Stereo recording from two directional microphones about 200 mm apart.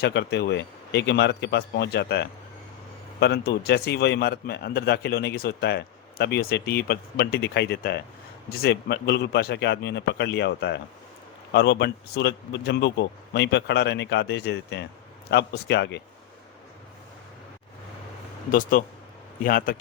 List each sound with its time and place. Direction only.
0.0 s a man's voice: 55° left (ahead or behind)
18.5 s a man's voice: 45° left (ahead or behind)